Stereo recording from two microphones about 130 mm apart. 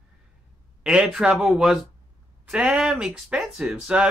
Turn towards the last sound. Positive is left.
turn(degrees=-10)  # may be behind; listen again after turning